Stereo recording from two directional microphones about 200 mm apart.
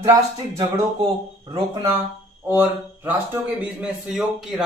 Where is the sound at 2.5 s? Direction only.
10° right (ahead or behind).